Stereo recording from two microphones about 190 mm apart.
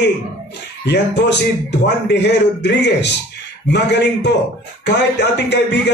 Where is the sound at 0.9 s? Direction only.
65° left (ahead or behind).